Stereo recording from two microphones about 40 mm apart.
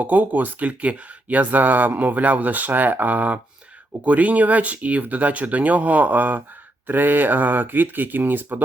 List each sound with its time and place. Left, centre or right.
0.0 s speech: right